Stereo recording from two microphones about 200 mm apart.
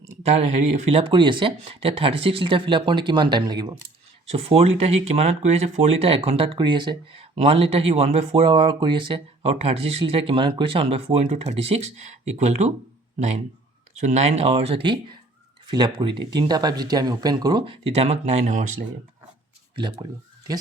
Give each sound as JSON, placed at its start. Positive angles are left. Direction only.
{"t": 0.2, "sound": "speech", "side_deg": -30}
{"t": 14.0, "sound": "speech", "side_deg": -35}
{"t": 19.7, "sound": "speech", "side_deg": -25}